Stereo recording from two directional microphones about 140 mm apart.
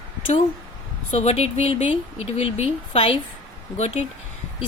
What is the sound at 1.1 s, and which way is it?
Speech, 50° left (ahead or behind).